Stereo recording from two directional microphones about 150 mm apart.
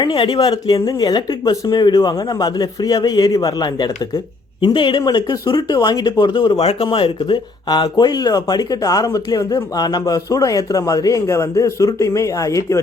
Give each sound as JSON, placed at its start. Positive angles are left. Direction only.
{"t": 0.0, "sound": "speech", "side_deg": 30}